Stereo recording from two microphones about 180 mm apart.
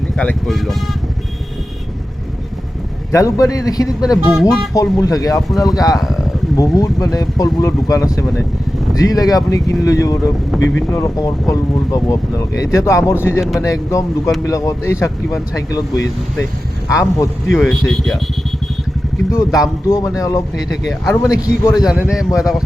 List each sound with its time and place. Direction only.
0.2 s a man's voice: 5° left (ahead or behind)
3.1 s speech: 20° left (ahead or behind)
4.0 s a man's voice: centre (ahead or behind)
4.7 s speech: 20° left (ahead or behind)
6.0 s a sound: centre (ahead or behind)
6.6 s speech: 20° left (ahead or behind)
17.5 s a man's voice: centre (ahead or behind)
19.3 s speech: 20° left (ahead or behind)
21.8 s a man's voice: 5° right (ahead or behind)